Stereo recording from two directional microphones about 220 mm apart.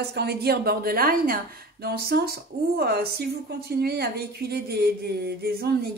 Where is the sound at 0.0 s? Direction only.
45° right (ahead or behind).